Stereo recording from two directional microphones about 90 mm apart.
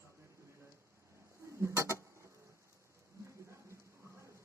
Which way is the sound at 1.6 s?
30° right (ahead or behind).